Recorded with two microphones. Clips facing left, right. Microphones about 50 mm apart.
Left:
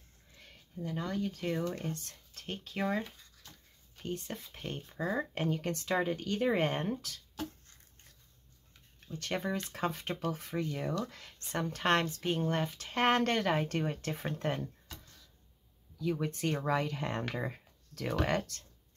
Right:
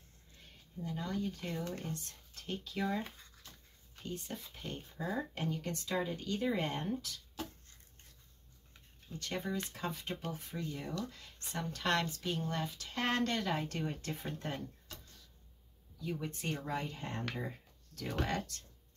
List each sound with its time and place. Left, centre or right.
0.4 s speech: left
1.6 s speech: left
1.9 s speech: left
4.0 s speech: left
9.0 s speech: left
11.1 s speech: left
11.5 s speech: left
16.0 s speech: left
17.4 s speech: left